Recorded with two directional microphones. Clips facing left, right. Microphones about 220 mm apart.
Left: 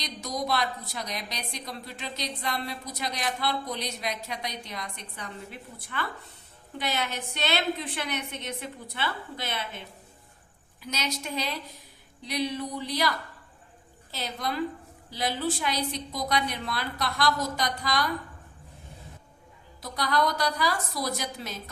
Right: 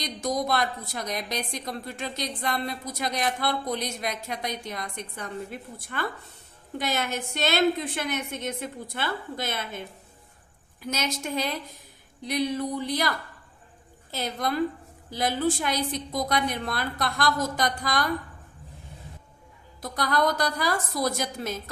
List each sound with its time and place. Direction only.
0.0 s a woman's voice: 50° right (ahead or behind)
10.8 s a woman's voice: 50° right (ahead or behind)
19.8 s a woman's voice: 50° right (ahead or behind)